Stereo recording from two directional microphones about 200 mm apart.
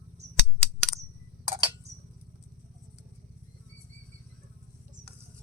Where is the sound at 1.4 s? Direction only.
30° right (ahead or behind).